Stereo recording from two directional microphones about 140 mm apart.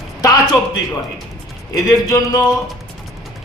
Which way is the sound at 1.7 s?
25° left (ahead or behind).